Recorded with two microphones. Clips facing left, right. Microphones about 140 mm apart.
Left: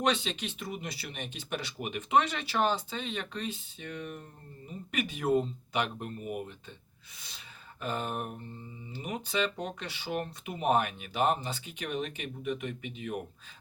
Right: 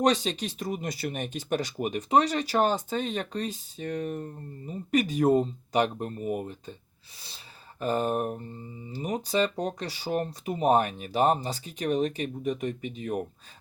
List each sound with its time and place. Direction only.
0.0 s speech: 40° right (ahead or behind)